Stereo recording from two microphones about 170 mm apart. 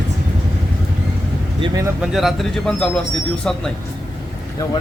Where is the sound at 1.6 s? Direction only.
20° right (ahead or behind).